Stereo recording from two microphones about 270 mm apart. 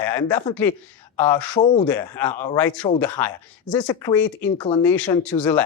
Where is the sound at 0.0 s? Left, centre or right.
Centre.